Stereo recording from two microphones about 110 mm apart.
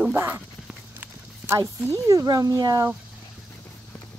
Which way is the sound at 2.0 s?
35° right (ahead or behind).